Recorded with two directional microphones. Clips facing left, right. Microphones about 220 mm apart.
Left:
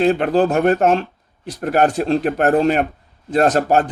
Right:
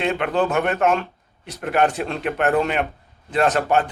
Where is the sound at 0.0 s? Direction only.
35° left (ahead or behind).